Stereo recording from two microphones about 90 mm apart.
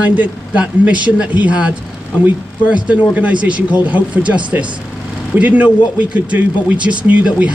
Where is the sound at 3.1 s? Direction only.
15° right (ahead or behind).